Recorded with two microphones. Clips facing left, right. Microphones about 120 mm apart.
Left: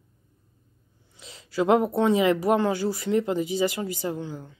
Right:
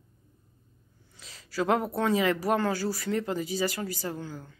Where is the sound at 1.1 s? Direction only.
20° left (ahead or behind).